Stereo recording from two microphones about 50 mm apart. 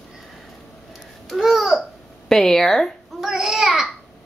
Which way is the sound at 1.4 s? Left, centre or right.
Centre.